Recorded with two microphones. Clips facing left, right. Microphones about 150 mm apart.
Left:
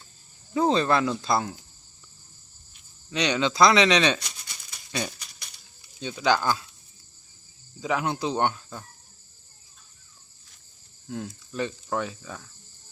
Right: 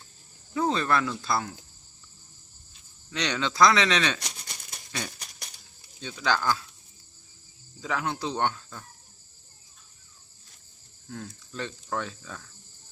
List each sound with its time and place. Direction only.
0.5 s speech: 25° left (ahead or behind)
3.1 s speech: 15° left (ahead or behind)
7.8 s speech: 15° left (ahead or behind)
11.1 s speech: 15° left (ahead or behind)